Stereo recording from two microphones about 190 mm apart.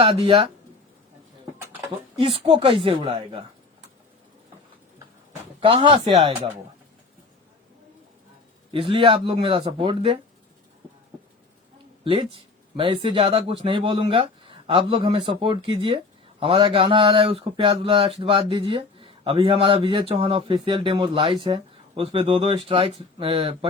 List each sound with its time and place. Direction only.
0.0 s speech: 30° right (ahead or behind)
2.2 s speech: 30° right (ahead or behind)
5.5 s speech: 30° right (ahead or behind)
8.7 s speech: 30° right (ahead or behind)
12.0 s speech: 30° right (ahead or behind)